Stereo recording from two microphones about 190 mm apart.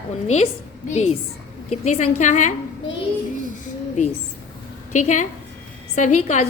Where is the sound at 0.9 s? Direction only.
35° left (ahead or behind).